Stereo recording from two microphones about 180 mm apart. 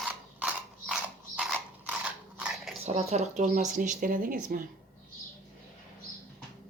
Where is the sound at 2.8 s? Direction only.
35° right (ahead or behind).